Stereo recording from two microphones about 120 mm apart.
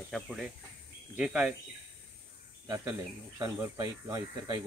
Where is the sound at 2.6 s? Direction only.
25° right (ahead or behind).